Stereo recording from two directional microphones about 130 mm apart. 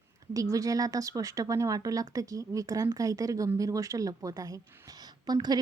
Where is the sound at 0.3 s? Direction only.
25° right (ahead or behind).